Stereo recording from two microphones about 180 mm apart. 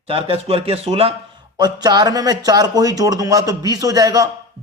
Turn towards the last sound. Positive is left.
turn(degrees=-20)  # may be behind; listen again after turning